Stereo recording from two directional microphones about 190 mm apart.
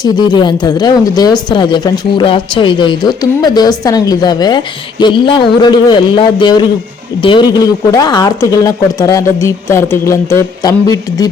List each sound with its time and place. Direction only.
0.0 s a woman's voice: 25° left (ahead or behind)